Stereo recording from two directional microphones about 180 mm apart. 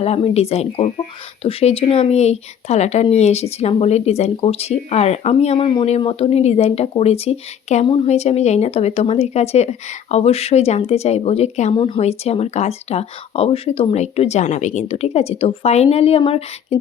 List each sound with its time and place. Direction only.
0.0 s speech: 35° left (ahead or behind)